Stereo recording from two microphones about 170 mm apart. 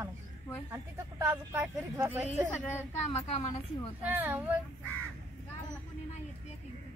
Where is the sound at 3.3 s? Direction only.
40° left (ahead or behind).